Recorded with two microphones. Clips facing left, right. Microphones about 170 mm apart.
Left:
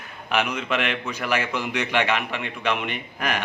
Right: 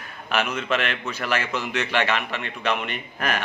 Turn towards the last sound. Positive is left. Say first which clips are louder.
# even
turn(degrees=10)  # may be behind; listen again after turning